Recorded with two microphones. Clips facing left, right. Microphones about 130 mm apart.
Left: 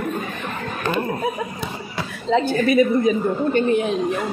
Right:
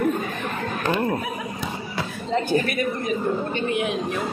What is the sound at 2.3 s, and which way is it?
Speech, 90° left.